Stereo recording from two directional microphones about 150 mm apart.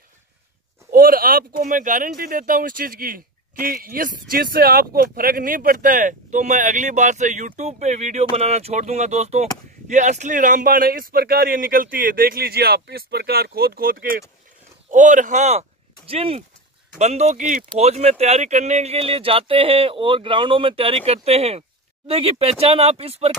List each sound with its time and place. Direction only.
0.9 s speech: 75° right (ahead or behind)
14.9 s speech: 55° right (ahead or behind)
16.1 s speech: 40° right (ahead or behind); by 17.6 s 55° right (ahead or behind)
17.7 s speech: 45° right (ahead or behind)